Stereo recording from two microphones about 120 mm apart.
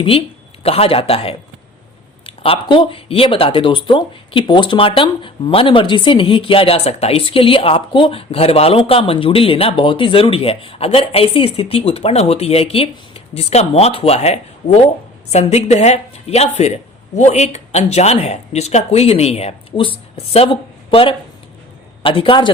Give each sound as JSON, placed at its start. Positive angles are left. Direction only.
{"t": 0.6, "sound": "speech", "side_deg": 55}